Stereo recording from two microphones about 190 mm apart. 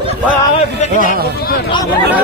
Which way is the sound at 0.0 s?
30° left (ahead or behind).